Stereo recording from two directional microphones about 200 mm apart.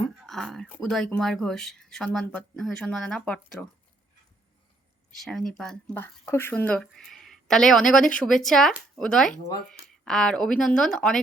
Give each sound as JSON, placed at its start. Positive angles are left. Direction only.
{"t": 0.2, "sound": "speech", "side_deg": 0}
{"t": 5.1, "sound": "speech", "side_deg": 0}